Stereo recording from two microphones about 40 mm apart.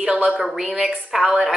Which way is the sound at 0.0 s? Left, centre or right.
Right.